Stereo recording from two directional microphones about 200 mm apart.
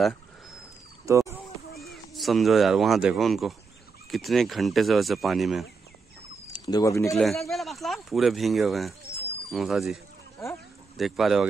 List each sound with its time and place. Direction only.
1.0 s speech: 15° right (ahead or behind)
1.8 s speech: centre (ahead or behind)
6.4 s speech: 20° left (ahead or behind)
7.2 s speech: centre (ahead or behind)
11.0 s speech: centre (ahead or behind)